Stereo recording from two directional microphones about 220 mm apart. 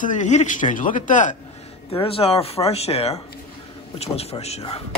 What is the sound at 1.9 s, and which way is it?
A man's voice, 25° left (ahead or behind).